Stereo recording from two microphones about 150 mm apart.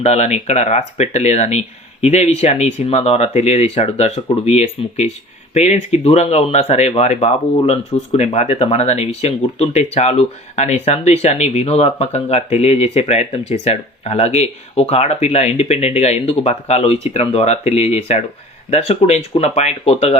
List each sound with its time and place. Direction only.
0.0 s speech: 45° left (ahead or behind)